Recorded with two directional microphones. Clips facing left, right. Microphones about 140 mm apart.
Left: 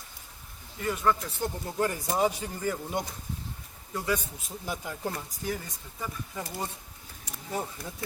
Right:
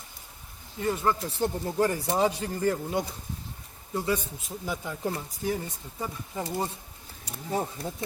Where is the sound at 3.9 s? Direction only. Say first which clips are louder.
Right 2 dB; 25° right (ahead or behind).